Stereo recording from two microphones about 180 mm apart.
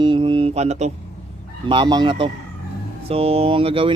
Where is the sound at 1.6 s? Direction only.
25° right (ahead or behind).